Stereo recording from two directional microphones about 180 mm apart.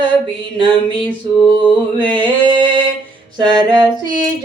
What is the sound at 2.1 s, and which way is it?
Mantra, 25° right (ahead or behind).